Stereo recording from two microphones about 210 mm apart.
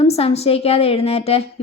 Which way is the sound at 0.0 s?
25° left (ahead or behind).